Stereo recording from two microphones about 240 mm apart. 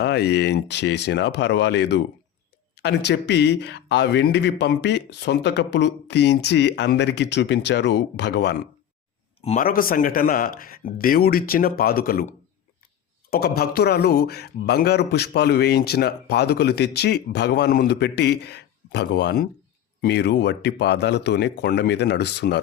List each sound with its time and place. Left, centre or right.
0.0 s a man's voice: left
9.4 s speech: left
13.3 s a man's voice: left